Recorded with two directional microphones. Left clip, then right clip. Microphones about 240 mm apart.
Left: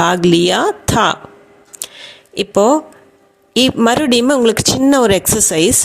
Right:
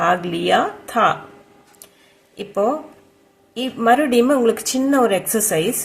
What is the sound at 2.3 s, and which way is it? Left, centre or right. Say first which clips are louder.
Speech: left 8 dB; left.